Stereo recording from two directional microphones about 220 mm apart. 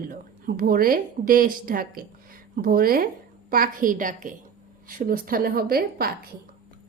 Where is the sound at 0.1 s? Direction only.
40° right (ahead or behind).